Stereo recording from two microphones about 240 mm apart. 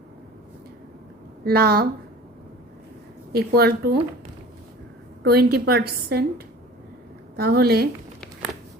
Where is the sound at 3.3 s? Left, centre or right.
Right.